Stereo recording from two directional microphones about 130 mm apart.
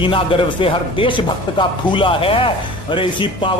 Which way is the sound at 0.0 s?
40° left (ahead or behind).